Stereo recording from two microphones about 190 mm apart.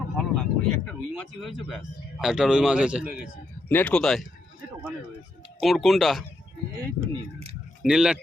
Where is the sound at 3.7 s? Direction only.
10° left (ahead or behind).